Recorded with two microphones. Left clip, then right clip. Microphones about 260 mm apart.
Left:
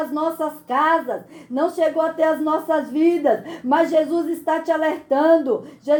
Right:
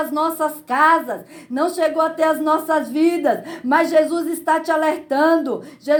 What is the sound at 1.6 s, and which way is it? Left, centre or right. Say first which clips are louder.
Speech: right 1 dB; right.